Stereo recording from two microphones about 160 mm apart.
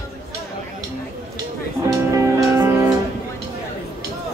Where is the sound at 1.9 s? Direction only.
20° right (ahead or behind).